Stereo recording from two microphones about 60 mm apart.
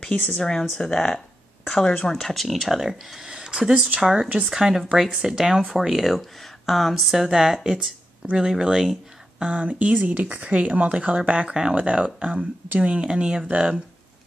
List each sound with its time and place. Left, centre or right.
0.0 s speech: centre
9.4 s speech: centre